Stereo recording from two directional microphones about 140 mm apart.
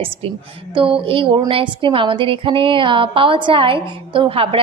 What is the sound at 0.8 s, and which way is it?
Speech, 40° right (ahead or behind).